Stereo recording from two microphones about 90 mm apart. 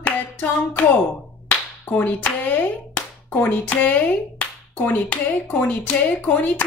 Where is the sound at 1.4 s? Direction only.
20° left (ahead or behind).